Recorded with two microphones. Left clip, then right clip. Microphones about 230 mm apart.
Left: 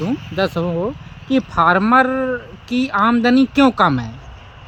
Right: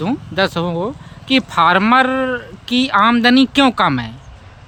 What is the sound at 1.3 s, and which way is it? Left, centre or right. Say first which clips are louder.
Speech: right 2 dB; centre.